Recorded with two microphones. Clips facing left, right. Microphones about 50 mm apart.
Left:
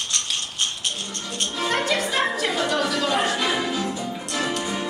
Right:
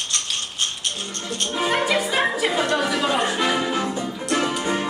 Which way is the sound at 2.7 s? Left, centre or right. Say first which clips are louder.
Right 1 dB; centre.